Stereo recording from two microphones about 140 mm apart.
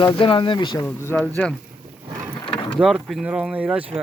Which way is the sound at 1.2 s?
5° left (ahead or behind).